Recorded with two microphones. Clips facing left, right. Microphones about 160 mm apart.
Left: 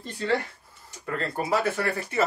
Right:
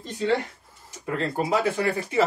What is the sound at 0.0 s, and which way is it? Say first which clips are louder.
A man's voice: right 2 dB; 20° right (ahead or behind).